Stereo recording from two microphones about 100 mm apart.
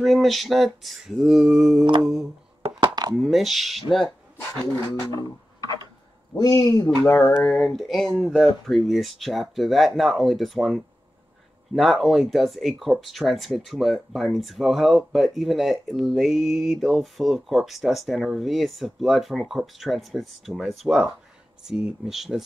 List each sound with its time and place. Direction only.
0.0 s speech: centre (ahead or behind)
2.9 s a sound: 45° right (ahead or behind)
3.2 s speech: centre (ahead or behind)
4.7 s speech: 40° left (ahead or behind)
7.1 s a sound: 25° left (ahead or behind)
7.4 s speech: 5° left (ahead or behind)